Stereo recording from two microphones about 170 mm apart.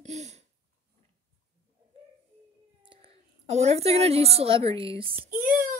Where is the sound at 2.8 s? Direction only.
35° right (ahead or behind).